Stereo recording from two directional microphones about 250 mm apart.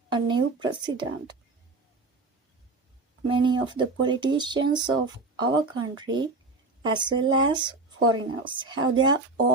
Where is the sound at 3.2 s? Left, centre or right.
Centre.